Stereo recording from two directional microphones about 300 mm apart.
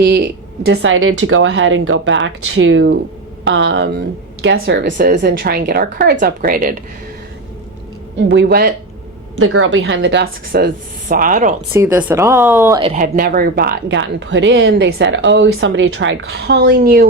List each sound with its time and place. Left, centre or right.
0.0 s speech: right
8.1 s speech: right
9.4 s a woman's voice: right
11.7 s speech: centre; by 17.1 s right